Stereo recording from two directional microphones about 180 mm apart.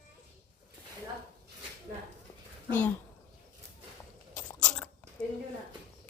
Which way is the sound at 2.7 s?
10° left (ahead or behind).